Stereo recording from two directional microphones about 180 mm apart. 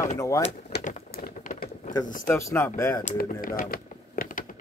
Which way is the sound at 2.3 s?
15° left (ahead or behind).